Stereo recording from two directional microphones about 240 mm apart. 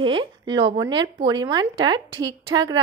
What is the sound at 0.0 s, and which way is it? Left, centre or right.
Speech, right.